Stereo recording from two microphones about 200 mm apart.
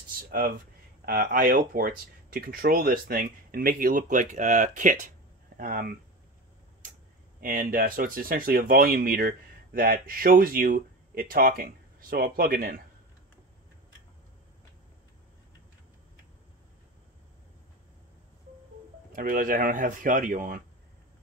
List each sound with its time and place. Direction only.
1.0 s speech: 45° right (ahead or behind)
7.3 s speech: 45° right (ahead or behind)
19.1 s speech: 40° right (ahead or behind)